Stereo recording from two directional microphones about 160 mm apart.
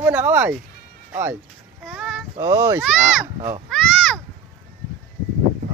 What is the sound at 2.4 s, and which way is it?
Speech, 20° right (ahead or behind).